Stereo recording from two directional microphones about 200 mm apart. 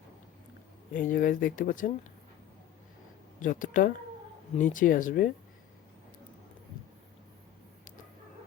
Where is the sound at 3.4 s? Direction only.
40° left (ahead or behind).